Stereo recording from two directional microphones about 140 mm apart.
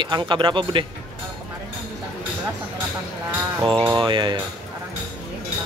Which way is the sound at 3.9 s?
35° right (ahead or behind).